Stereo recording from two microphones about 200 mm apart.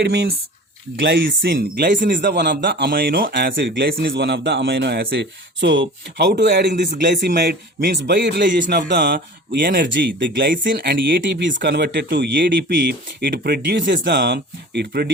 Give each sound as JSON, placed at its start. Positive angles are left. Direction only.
{"t": 0.0, "sound": "speech", "side_deg": -55}
{"t": 0.9, "sound": "speech", "side_deg": -65}
{"t": 2.3, "sound": "speech", "side_deg": -55}
{"t": 4.1, "sound": "speech", "side_deg": -60}